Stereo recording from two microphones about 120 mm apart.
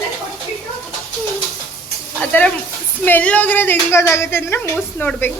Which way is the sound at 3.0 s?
15° left (ahead or behind).